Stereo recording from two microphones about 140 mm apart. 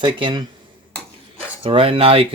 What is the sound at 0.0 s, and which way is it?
Speech, 35° right (ahead or behind).